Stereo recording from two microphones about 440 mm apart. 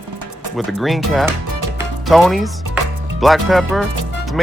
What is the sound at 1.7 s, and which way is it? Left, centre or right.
Music, centre.